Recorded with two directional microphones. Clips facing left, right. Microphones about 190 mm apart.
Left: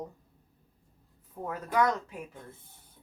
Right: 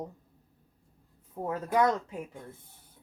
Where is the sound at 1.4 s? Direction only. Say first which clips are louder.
Right 2 dB; 25° right (ahead or behind).